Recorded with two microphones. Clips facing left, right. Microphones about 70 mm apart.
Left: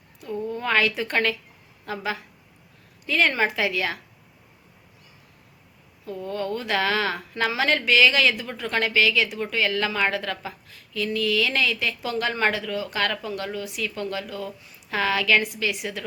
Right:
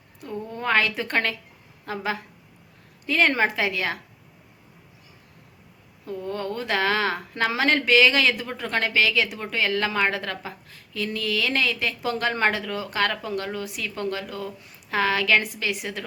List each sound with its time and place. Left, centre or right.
0.5 s a woman's voice: right
3.1 s a woman's voice: right
6.1 s a woman's voice: right